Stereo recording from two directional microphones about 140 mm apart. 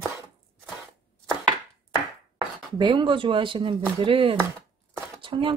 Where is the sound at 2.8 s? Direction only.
35° right (ahead or behind).